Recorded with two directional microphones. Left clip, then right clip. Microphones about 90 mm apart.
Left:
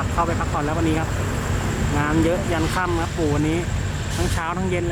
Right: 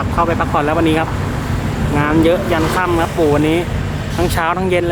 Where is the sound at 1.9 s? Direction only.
25° right (ahead or behind).